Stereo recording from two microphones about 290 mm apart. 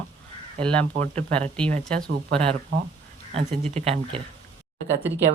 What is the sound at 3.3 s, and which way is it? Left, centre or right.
Speech, right.